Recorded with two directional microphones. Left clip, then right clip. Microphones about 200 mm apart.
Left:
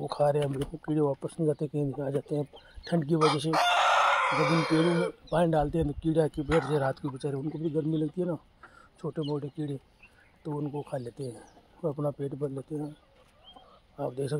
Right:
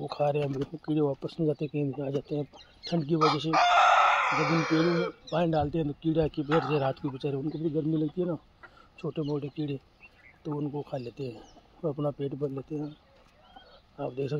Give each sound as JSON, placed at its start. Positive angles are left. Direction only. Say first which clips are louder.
{"t": 0.0, "sound": "speech", "louder": "left 2 dB", "side_deg": 15}
{"t": 3.4, "sound": "speech", "louder": "right 3 dB", "side_deg": 55}
{"t": 5.3, "sound": "speech", "louder": "left 2 dB", "side_deg": 20}
{"t": 13.9, "sound": "speech", "louder": "even", "side_deg": 15}